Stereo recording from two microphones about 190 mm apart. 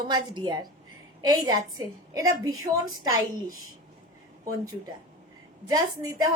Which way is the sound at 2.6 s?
90° right.